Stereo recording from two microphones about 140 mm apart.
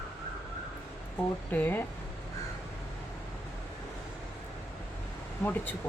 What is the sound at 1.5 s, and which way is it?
Speech, 15° left (ahead or behind).